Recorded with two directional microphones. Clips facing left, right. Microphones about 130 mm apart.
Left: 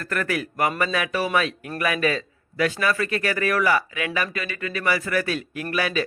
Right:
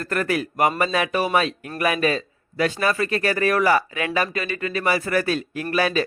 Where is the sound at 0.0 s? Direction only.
25° right (ahead or behind).